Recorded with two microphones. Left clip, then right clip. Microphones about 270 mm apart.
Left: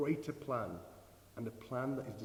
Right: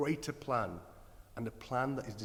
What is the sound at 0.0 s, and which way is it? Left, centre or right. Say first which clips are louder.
A man's voice: right 2 dB; right.